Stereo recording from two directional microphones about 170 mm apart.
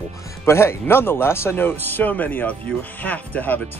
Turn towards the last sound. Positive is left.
turn(degrees=10)  # may be behind; listen again after turning